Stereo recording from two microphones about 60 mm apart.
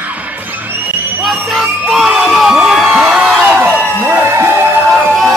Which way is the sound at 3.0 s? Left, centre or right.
Centre.